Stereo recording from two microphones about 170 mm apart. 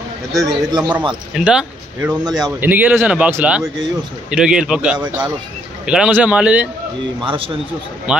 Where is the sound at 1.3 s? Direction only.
5° right (ahead or behind).